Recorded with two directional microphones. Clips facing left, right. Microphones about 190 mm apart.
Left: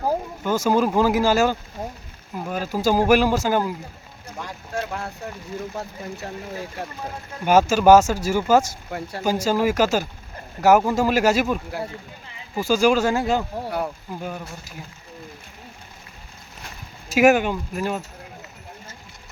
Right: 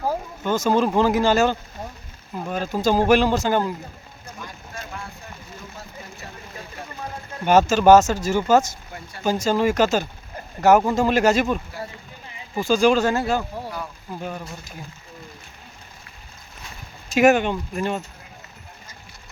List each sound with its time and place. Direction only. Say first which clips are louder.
0.0 s speech: left 1 dB; 10° left (ahead or behind)
4.4 s a sound: left 9 dB; 70° left (ahead or behind)
7.4 s speech: even; 10° left (ahead or behind)
8.9 s speech: left 8 dB; 60° left (ahead or behind)
9.2 s speech: right 1 dB; 10° left (ahead or behind)
14.2 s speech: right 2 dB; 5° left (ahead or behind)
17.1 s speech: even; 5° left (ahead or behind)